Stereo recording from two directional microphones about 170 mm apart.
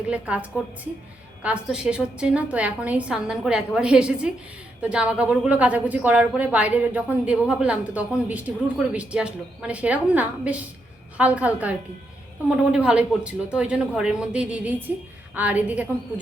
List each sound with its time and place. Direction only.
0.1 s a woman's voice: 5° right (ahead or behind)